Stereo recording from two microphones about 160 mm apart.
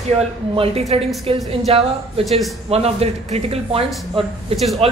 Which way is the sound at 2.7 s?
40° right (ahead or behind).